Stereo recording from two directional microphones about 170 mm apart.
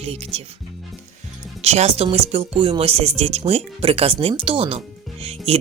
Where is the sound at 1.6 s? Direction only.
40° right (ahead or behind).